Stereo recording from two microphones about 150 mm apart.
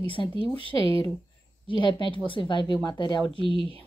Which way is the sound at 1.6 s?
30° left (ahead or behind).